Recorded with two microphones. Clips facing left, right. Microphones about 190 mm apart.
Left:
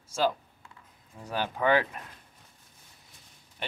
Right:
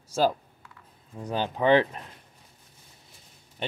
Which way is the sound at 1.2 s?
20° right (ahead or behind).